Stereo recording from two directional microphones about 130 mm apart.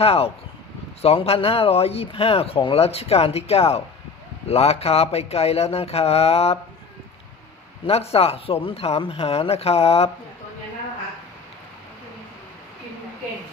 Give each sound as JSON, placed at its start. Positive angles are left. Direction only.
{"t": 0.0, "sound": "speech", "side_deg": 50}
{"t": 7.9, "sound": "speech", "side_deg": 50}